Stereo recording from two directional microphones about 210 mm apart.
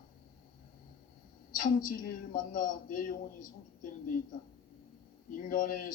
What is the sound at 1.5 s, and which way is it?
A man's voice, 40° left (ahead or behind).